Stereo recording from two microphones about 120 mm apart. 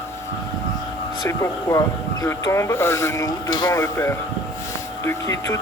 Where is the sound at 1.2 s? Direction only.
25° left (ahead or behind).